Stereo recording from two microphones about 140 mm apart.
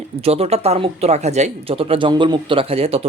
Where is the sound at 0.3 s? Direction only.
45° right (ahead or behind).